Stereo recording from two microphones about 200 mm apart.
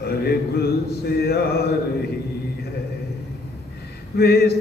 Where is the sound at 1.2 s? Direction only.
50° left (ahead or behind).